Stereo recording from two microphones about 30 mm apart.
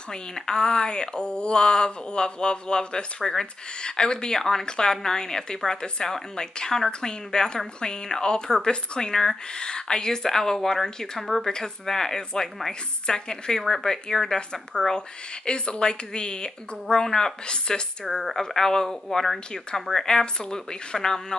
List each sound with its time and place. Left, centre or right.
0.1 s speech: left
3.2 s a woman's voice: centre
4.6 s speech: left
9.1 s a woman's voice: centre
15.0 s speech: left
18.0 s a woman's voice: centre
18.4 s speech: centre